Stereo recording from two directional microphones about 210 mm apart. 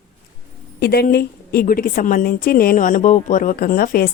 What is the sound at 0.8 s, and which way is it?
A woman's voice, 50° left (ahead or behind).